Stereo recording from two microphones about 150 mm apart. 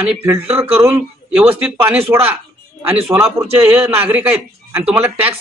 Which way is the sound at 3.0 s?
10° right (ahead or behind).